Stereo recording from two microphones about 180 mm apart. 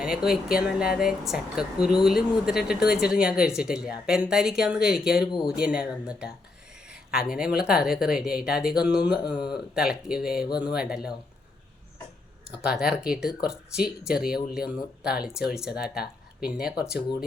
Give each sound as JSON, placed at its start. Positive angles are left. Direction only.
{"t": 0.0, "sound": "speech", "side_deg": -5}
{"t": 5.3, "sound": "speech", "side_deg": 25}
{"t": 5.5, "sound": "speech", "side_deg": -5}
{"t": 12.5, "sound": "speech", "side_deg": -5}